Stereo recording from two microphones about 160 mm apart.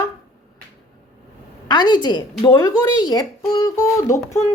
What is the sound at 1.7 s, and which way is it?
Speech, 25° left (ahead or behind).